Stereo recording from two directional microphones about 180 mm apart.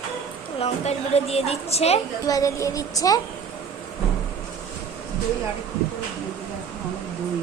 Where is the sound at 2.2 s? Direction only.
20° left (ahead or behind).